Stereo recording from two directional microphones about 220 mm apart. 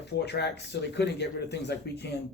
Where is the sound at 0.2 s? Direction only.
50° left (ahead or behind).